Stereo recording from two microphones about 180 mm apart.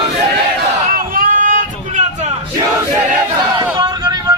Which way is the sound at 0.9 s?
50° right (ahead or behind).